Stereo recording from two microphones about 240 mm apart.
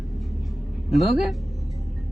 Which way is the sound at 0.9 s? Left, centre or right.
Centre.